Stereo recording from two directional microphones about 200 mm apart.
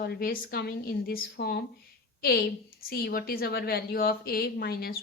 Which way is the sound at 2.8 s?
50° left (ahead or behind).